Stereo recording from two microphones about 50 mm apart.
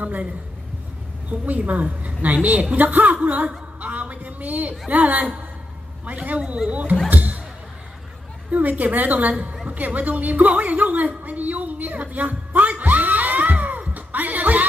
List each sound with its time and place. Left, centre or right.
0.0 s a woman's voice: right
1.3 s a woman's voice: right
7.1 s music: right
8.5 s a woman's voice: right
9.7 s a sound: right